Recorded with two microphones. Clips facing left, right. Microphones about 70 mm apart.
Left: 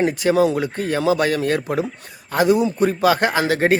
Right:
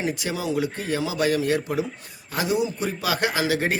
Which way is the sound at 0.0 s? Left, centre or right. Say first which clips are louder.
Left 11 dB; left.